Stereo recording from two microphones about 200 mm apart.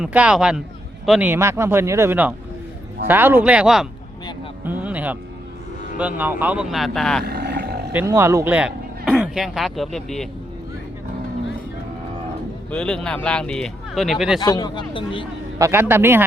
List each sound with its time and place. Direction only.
0.0 s speech: 5° right (ahead or behind)
4.6 s a sound: 10° right (ahead or behind)
6.0 s speech: 10° right (ahead or behind)
7.3 s roar: 55° right (ahead or behind)
7.9 s a man's voice: 15° right (ahead or behind); by 10.2 s centre (ahead or behind)
12.7 s speech: 5° left (ahead or behind)
14.4 s speech: 20° left (ahead or behind)
15.5 s speech: 15° right (ahead or behind)